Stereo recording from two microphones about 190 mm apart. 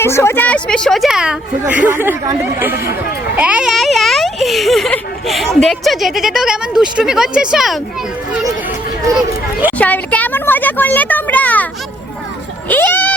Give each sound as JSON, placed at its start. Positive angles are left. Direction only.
{"t": 0.0, "sound": "a child's voice", "side_deg": 15}
{"t": 2.7, "sound": "speech", "side_deg": 55}
{"t": 3.3, "sound": "a child's voice", "side_deg": -5}
{"t": 9.1, "sound": "speech", "side_deg": -10}
{"t": 9.7, "sound": "speech", "side_deg": 10}